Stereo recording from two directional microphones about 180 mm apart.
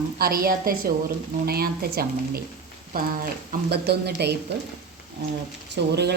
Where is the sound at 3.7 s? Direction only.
65° right (ahead or behind).